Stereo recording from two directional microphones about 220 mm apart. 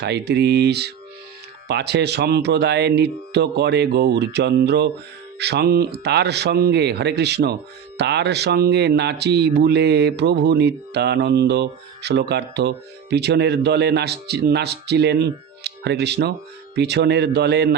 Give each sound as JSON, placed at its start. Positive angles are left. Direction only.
{"t": 0.0, "sound": "speech", "side_deg": -50}